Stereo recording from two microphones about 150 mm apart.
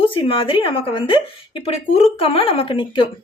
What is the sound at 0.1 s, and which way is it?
A woman's voice, 35° left (ahead or behind).